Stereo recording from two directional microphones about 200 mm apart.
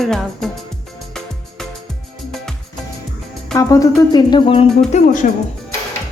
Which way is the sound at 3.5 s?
15° left (ahead or behind).